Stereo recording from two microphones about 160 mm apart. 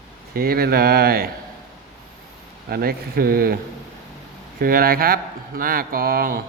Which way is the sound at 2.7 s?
70° right (ahead or behind).